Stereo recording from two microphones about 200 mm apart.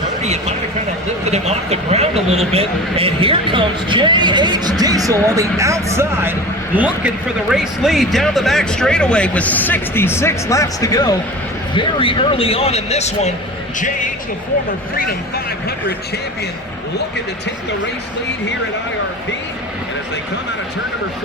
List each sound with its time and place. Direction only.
0.2 s a man's voice: 35° right (ahead or behind); by 14.1 s 40° left (ahead or behind)